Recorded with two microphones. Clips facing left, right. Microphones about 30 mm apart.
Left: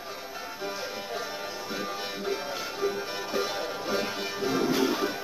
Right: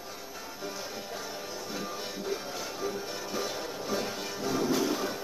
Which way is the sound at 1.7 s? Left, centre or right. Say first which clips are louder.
Left 4 dB; left.